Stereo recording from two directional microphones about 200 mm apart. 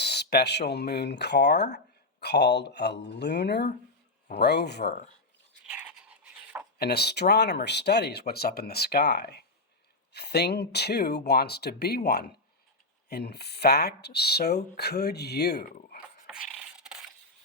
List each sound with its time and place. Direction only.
0.0 s speech: 55° left (ahead or behind)
5.6 s toothbrush: 5° right (ahead or behind)
6.7 s speech: 55° left (ahead or behind)